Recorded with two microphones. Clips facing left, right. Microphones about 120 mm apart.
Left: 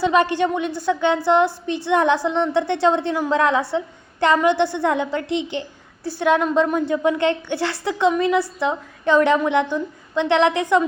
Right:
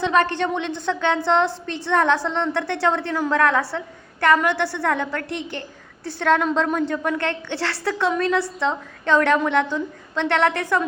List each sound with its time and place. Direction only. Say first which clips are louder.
0.0 s a woman's voice: left 2 dB; 10° left (ahead or behind)